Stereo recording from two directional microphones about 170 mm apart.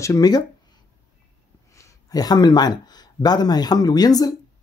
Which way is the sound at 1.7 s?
20° left (ahead or behind).